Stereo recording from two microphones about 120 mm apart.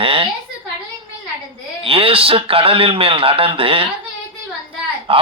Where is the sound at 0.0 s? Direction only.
50° right (ahead or behind).